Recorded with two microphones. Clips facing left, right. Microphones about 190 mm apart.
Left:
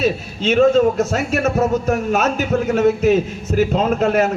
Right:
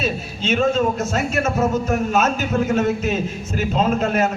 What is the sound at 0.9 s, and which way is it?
A man's voice, 65° left (ahead or behind).